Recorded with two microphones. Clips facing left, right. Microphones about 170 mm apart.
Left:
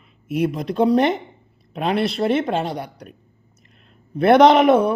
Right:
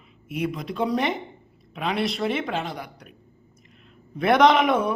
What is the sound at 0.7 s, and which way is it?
Speech, 35° left (ahead or behind).